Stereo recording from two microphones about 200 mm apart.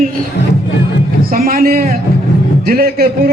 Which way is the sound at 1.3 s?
45° right (ahead or behind).